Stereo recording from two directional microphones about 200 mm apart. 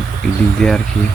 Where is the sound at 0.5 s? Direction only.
5° left (ahead or behind).